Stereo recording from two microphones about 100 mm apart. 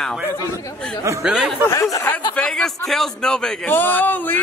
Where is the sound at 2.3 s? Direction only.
10° left (ahead or behind).